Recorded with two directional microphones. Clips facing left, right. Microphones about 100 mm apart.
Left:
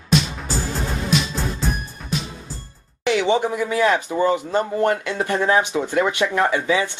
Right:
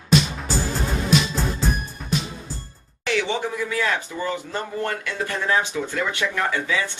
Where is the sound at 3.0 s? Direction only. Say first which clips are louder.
Left 5 dB; 20° left (ahead or behind).